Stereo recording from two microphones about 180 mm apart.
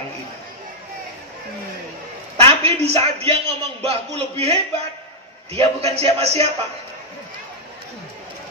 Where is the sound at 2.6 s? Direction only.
35° right (ahead or behind).